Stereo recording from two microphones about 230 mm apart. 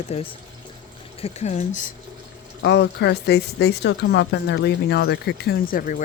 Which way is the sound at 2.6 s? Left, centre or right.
Left.